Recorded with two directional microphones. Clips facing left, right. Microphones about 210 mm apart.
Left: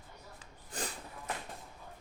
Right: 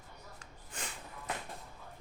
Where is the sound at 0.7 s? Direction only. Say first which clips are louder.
Left 5 dB; 35° left (ahead or behind).